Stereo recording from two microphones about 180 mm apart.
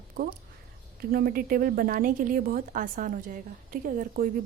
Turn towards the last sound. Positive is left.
turn(degrees=-50)  # may be behind; listen again after turning